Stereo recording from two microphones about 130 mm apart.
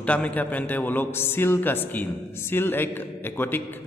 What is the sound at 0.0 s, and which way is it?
A man's voice, 10° left (ahead or behind).